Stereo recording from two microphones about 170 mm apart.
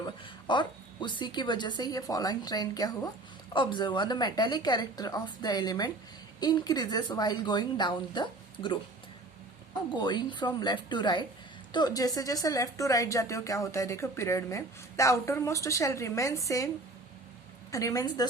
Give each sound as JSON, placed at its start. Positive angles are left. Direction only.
{"t": 0.0, "sound": "speech", "side_deg": 25}
{"t": 9.9, "sound": "speech", "side_deg": 25}
{"t": 17.7, "sound": "speech", "side_deg": 20}